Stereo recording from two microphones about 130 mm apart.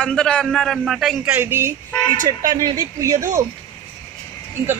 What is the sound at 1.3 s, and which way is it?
A man's voice, 20° right (ahead or behind).